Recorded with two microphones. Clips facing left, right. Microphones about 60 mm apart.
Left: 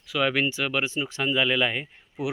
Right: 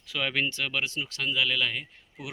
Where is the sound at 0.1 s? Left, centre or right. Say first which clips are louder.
Left 5 dB; centre.